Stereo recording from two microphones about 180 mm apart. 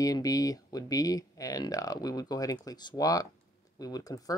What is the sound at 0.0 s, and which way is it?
Speech, 20° left (ahead or behind).